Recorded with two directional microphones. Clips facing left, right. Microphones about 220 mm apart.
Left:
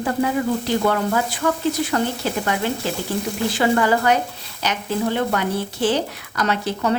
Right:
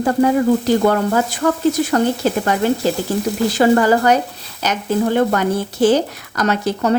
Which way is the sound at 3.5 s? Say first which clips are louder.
Right 5 dB; 40° right (ahead or behind).